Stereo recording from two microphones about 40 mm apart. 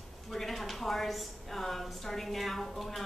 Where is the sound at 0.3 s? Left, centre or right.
Centre.